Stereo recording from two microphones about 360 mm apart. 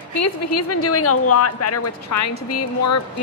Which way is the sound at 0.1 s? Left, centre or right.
Left.